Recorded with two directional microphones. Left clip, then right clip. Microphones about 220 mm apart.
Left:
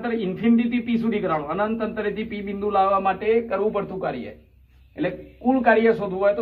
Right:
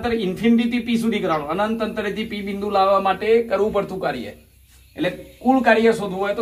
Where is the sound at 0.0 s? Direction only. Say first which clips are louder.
Right 3 dB; centre (ahead or behind).